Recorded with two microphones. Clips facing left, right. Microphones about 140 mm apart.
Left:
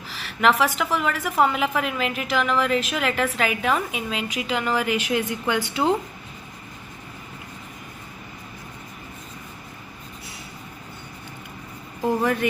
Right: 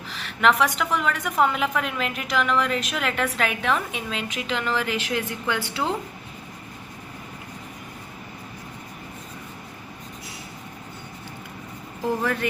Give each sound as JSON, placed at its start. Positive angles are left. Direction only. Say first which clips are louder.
{"t": 0.1, "sound": "a woman's voice", "louder": "left 1 dB", "side_deg": 5}
{"t": 12.2, "sound": "speech", "louder": "left 3 dB", "side_deg": 15}